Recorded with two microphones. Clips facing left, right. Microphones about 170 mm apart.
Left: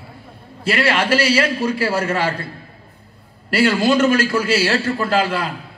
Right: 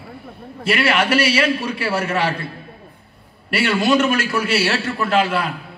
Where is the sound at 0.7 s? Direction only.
30° left (ahead or behind).